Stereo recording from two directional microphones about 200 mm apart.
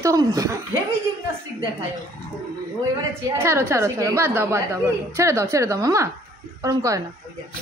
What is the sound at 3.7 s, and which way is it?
A woman's voice, 15° right (ahead or behind).